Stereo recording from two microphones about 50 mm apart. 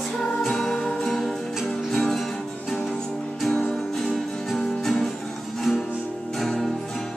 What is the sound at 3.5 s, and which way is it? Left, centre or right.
Music, centre.